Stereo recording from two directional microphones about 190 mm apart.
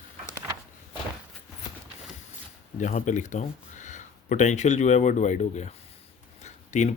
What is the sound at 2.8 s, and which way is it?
Speech, 40° left (ahead or behind).